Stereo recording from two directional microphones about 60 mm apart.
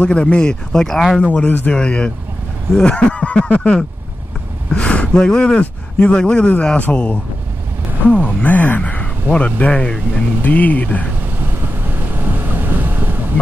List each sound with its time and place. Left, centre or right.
0.0 s speech: centre
1.2 s speech: left
11.6 s vehicle: right